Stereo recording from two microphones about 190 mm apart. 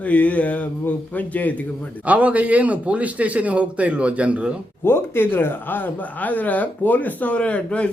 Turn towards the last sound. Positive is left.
turn(degrees=5)  # may be behind; listen again after turning